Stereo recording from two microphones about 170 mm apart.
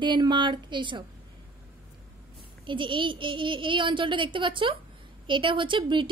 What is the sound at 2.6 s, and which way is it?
A woman's voice, 30° right (ahead or behind).